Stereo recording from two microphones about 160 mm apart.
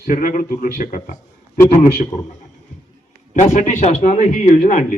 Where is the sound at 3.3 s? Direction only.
50° left (ahead or behind).